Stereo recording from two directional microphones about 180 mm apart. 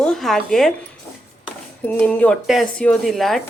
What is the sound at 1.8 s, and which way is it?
A woman's voice, 10° left (ahead or behind).